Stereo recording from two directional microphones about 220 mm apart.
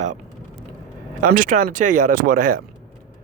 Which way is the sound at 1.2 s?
40° right (ahead or behind).